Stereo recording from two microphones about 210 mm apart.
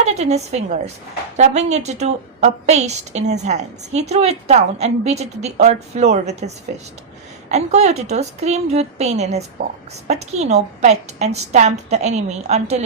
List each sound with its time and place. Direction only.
0.0 s a woman's voice: 30° right (ahead or behind)
7.5 s a woman's voice: 30° right (ahead or behind)